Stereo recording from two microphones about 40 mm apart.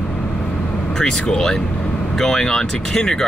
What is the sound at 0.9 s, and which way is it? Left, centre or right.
Speech, centre.